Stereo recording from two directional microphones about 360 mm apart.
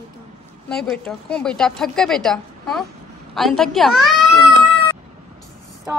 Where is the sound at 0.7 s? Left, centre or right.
Centre.